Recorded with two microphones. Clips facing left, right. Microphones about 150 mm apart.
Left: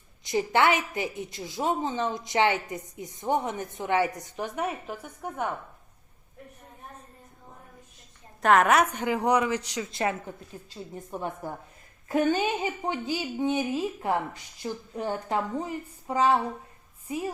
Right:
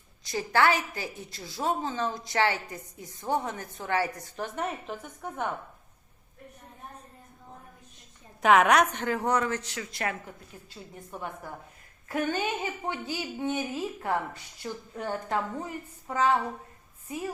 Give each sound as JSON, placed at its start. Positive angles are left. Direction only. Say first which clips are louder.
{"t": 0.3, "sound": "a woman's voice", "louder": "left 2 dB", "side_deg": 20}
{"t": 8.4, "sound": "a woman's voice", "louder": "even", "side_deg": 0}